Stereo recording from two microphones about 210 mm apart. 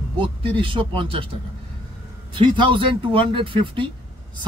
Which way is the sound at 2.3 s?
25° right (ahead or behind).